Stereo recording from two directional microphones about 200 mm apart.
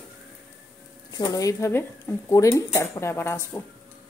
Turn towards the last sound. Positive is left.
turn(degrees=10)  # may be behind; listen again after turning